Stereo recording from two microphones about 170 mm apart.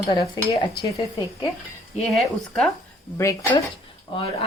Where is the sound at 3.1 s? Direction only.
15° left (ahead or behind).